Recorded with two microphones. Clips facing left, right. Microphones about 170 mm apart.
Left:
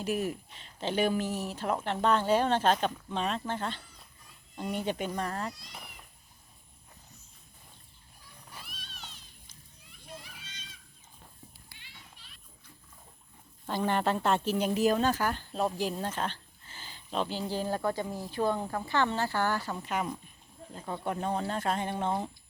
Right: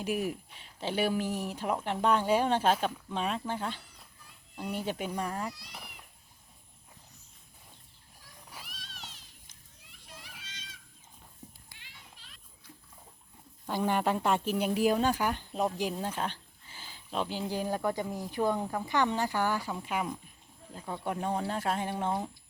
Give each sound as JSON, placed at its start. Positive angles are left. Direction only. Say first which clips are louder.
{"t": 0.0, "sound": "speech", "louder": "left 1 dB", "side_deg": -10}
{"t": 8.6, "sound": "cat", "louder": "even", "side_deg": -90}
{"t": 10.1, "sound": "children playing", "louder": "left 4 dB", "side_deg": -90}
{"t": 13.7, "sound": "speech", "louder": "even", "side_deg": -10}